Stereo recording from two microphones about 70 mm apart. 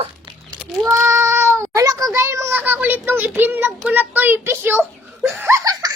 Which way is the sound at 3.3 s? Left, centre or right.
Right.